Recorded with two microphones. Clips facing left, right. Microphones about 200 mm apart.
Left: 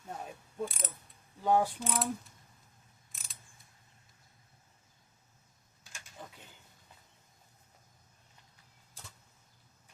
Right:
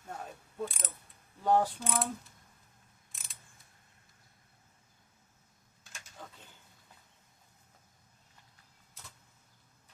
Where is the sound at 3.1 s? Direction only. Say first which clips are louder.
Even; centre (ahead or behind).